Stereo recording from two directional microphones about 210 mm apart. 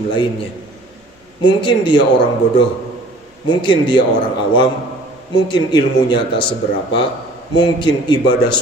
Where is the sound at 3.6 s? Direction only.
20° left (ahead or behind).